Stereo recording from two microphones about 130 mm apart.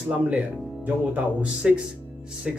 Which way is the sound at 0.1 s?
Centre (ahead or behind).